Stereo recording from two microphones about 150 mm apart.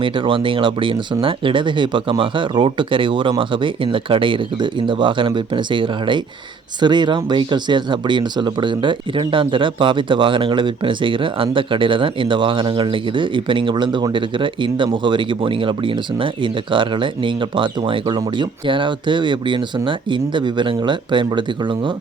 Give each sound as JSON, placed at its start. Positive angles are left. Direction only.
{"t": 0.0, "sound": "speech", "side_deg": -35}